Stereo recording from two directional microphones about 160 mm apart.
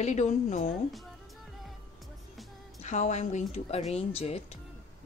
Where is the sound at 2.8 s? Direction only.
45° left (ahead or behind).